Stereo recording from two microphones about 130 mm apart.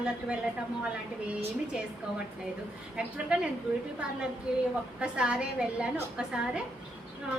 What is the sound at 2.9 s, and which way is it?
Speech, 5° right (ahead or behind).